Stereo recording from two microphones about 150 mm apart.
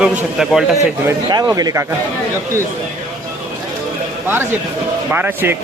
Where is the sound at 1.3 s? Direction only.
25° right (ahead or behind).